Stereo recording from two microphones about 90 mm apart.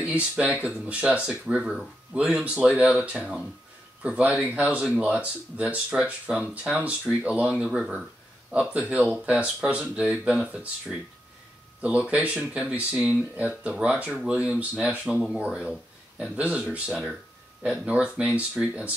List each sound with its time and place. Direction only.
0.0 s speech: 15° right (ahead or behind)